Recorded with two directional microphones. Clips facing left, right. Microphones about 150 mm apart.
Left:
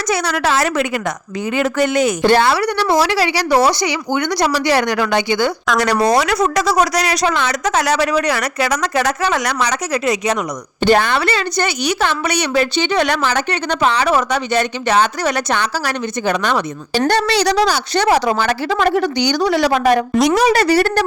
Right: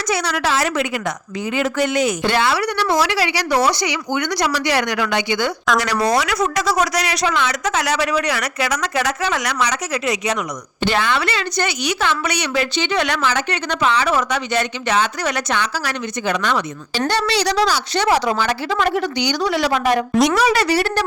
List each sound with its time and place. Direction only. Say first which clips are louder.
0.1 s a woman's voice: left 3 dB; 45° left (ahead or behind)
17.1 s a woman's voice: left 3 dB; 50° left (ahead or behind)